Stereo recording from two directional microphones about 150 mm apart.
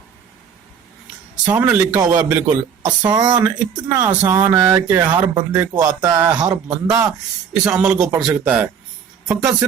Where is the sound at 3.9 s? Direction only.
10° right (ahead or behind).